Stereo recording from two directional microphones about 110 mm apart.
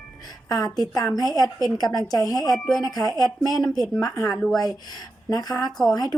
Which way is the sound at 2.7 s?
35° left (ahead or behind).